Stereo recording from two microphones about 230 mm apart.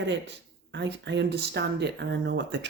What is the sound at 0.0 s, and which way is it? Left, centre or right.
Speech, right.